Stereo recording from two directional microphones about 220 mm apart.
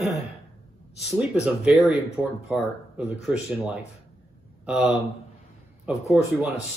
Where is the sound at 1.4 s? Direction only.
Centre (ahead or behind).